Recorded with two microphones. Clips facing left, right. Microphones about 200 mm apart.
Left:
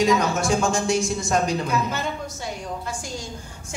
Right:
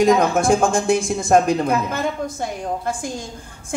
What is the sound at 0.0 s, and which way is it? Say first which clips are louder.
Speech: right 5 dB; 55° right (ahead or behind).